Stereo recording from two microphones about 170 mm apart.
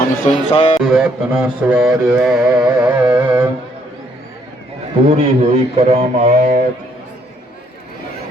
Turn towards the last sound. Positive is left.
turn(degrees=-50)  # may be behind; listen again after turning